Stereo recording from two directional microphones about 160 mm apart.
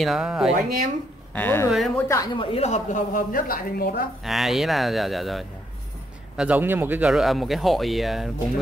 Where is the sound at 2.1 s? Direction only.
25° left (ahead or behind); by 4.0 s 70° left (ahead or behind).